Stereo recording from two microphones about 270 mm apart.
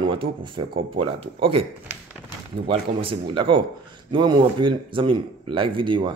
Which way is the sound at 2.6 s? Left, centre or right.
Centre.